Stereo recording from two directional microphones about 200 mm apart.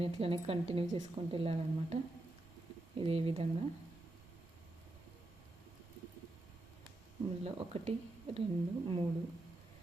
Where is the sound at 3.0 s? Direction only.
25° right (ahead or behind).